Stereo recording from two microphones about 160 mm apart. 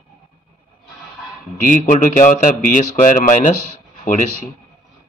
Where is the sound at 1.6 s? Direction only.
55° left (ahead or behind).